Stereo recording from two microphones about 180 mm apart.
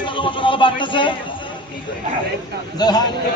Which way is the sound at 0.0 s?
25° left (ahead or behind).